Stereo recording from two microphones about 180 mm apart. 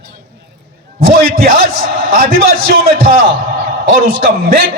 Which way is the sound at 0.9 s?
55° right (ahead or behind).